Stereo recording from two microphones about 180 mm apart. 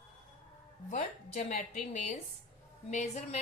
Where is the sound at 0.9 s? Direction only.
40° left (ahead or behind).